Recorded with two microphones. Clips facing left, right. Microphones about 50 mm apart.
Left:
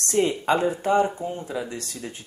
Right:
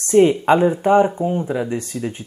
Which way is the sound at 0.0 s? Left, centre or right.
Centre.